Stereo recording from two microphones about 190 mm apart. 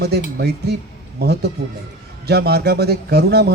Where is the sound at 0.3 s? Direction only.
55° right (ahead or behind).